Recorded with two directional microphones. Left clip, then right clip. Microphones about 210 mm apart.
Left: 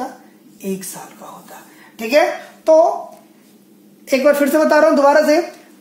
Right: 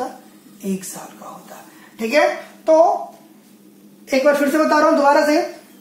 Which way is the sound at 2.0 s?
50° left (ahead or behind).